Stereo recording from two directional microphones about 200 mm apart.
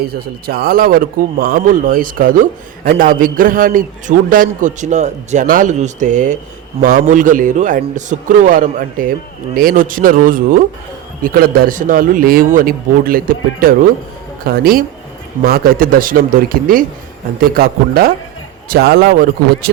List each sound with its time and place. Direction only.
0.0 s a man's voice: 50° right (ahead or behind)